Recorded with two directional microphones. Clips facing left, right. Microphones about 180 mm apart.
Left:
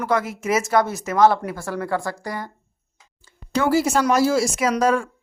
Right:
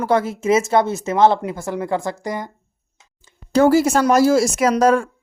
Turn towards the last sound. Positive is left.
turn(degrees=-45)  # may be behind; listen again after turning